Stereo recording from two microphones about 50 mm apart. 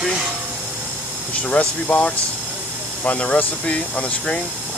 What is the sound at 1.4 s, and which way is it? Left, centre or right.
Speech, left.